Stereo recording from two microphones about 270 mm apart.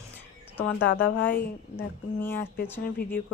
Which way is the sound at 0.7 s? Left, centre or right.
Left.